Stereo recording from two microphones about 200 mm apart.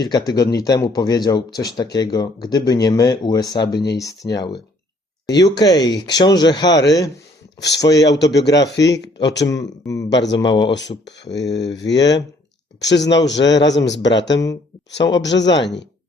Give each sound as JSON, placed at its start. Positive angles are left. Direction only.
{"t": 0.0, "sound": "speech", "side_deg": 20}
{"t": 7.9, "sound": "speech", "side_deg": 60}
{"t": 9.5, "sound": "speech", "side_deg": 15}
{"t": 10.1, "sound": "speech", "side_deg": 60}
{"t": 10.3, "sound": "speech", "side_deg": 20}
{"t": 10.8, "sound": "speech", "side_deg": 60}